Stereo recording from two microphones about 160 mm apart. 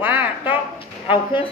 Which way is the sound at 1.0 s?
30° left (ahead or behind).